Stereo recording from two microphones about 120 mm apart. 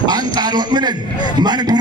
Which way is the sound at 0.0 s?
35° right (ahead or behind).